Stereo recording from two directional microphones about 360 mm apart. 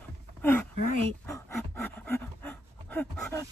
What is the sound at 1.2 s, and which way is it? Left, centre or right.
Pant, centre.